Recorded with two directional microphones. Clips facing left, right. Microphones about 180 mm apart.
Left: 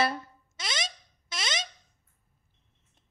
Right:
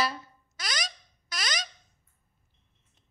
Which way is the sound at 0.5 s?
25° left (ahead or behind).